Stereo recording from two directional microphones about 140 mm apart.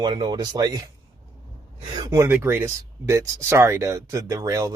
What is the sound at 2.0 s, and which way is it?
Speech, 20° right (ahead or behind).